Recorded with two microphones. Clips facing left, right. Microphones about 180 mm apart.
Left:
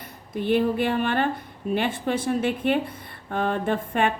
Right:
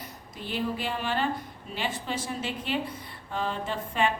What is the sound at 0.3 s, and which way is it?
A woman's voice, 55° left (ahead or behind).